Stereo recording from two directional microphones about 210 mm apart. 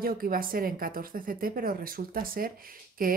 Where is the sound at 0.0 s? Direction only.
45° right (ahead or behind).